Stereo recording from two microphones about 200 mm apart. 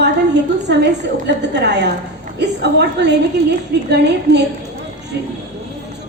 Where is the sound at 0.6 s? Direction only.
60° right (ahead or behind).